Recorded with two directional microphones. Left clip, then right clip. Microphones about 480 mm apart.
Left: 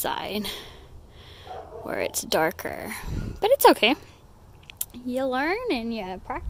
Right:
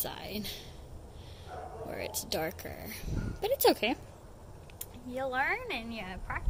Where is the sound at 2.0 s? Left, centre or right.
Centre.